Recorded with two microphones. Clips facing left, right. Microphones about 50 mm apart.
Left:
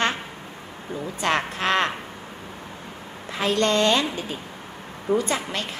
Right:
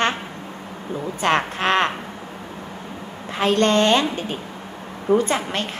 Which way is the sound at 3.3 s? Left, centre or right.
Right.